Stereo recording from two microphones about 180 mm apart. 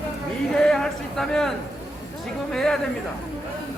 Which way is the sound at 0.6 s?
5° left (ahead or behind).